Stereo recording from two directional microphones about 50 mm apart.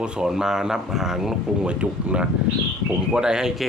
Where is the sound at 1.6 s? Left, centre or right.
Right.